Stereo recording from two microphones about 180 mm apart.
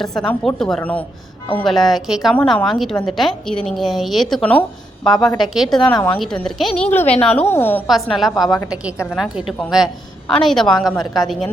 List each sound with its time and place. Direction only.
0.0 s a woman's voice: centre (ahead or behind)
7.9 s a woman's voice: centre (ahead or behind)
8.4 s a woman's voice: 20° left (ahead or behind)
9.0 s a woman's voice: 5° right (ahead or behind)
10.9 s a woman's voice: 20° left (ahead or behind)